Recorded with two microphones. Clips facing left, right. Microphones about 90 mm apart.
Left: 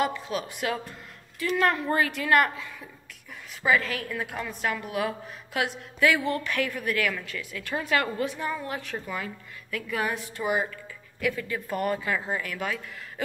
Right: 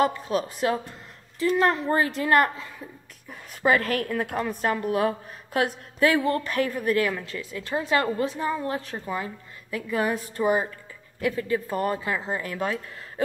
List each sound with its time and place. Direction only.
0.0 s a woman's voice: 40° right (ahead or behind)
3.6 s a woman's voice: 50° right (ahead or behind); by 12.8 s 30° right (ahead or behind)